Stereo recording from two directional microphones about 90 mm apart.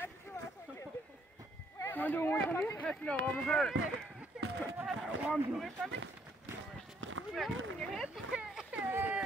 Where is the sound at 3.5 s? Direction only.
5° left (ahead or behind).